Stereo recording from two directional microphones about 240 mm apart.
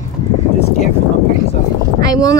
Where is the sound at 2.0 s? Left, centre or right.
Centre.